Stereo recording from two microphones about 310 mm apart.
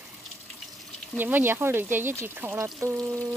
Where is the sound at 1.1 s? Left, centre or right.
Centre.